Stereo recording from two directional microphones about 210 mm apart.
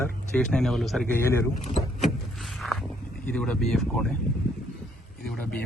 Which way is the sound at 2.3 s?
Centre (ahead or behind).